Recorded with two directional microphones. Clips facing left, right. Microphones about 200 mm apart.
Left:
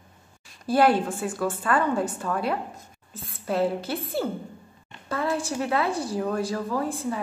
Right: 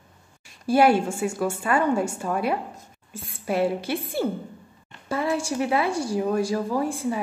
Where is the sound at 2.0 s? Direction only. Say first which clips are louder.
Right 1 dB; 25° right (ahead or behind).